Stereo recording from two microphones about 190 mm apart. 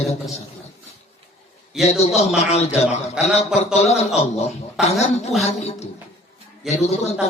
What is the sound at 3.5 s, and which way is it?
Speech, 35° left (ahead or behind).